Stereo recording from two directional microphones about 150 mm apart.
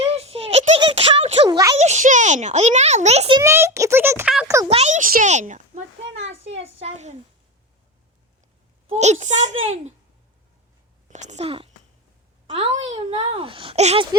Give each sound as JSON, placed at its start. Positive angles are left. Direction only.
{"t": 0.0, "sound": "giggle", "side_deg": -40}
{"t": 0.8, "sound": "a sound", "side_deg": -40}
{"t": 1.5, "sound": "a child's voice", "side_deg": -25}
{"t": 1.8, "sound": "a child's voice", "side_deg": -50}
{"t": 3.4, "sound": "a child's voice", "side_deg": -15}
{"t": 4.7, "sound": "a child's voice", "side_deg": -50}
{"t": 8.9, "sound": "a child's voice", "side_deg": -50}
{"t": 11.1, "sound": "a child's voice", "side_deg": -50}
{"t": 13.3, "sound": "speech", "side_deg": -35}